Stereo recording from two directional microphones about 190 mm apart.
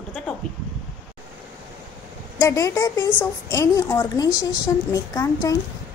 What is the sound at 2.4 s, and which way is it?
A woman's voice, 15° left (ahead or behind).